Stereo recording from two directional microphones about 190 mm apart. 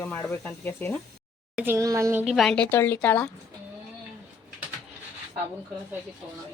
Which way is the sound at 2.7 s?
10° left (ahead or behind).